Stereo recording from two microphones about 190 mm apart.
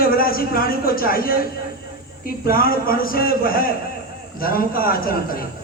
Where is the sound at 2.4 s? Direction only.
50° left (ahead or behind).